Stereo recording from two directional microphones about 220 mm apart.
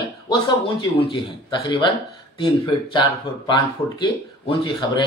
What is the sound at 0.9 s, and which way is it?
Speech, 25° left (ahead or behind).